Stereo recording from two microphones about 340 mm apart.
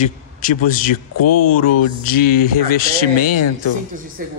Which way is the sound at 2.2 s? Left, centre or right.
Left.